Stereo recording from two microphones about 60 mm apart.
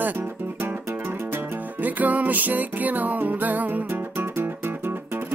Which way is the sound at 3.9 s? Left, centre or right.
Right.